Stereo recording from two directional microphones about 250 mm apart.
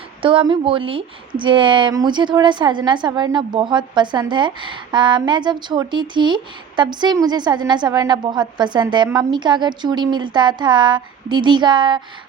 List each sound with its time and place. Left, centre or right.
0.2 s speech: right